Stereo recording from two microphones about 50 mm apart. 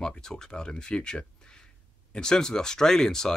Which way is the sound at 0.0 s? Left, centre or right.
Centre.